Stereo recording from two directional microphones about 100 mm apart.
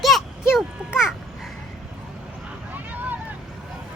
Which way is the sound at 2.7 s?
15° right (ahead or behind).